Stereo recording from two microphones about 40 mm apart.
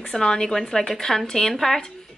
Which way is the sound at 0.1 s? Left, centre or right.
Centre.